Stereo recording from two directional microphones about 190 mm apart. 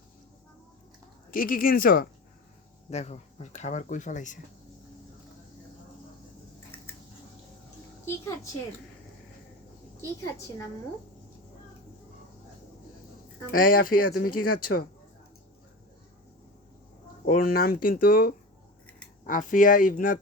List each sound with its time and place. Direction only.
1.3 s speech: 50° left (ahead or behind)
2.9 s speech: 35° left (ahead or behind)
13.5 s speech: 50° left (ahead or behind)
17.2 s speech: 50° left (ahead or behind)